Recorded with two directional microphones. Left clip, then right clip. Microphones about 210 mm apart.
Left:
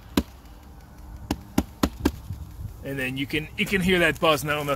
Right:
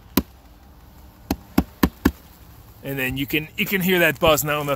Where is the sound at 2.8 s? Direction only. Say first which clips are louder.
Right 4 dB; 35° right (ahead or behind).